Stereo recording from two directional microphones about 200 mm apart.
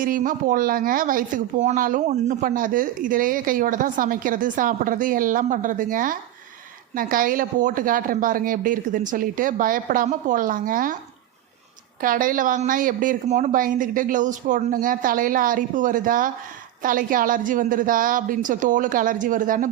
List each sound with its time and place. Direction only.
0.0 s speech: 45° right (ahead or behind)
11.9 s a woman's voice: 45° right (ahead or behind)